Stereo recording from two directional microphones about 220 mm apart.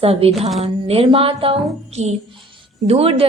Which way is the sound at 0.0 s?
25° right (ahead or behind).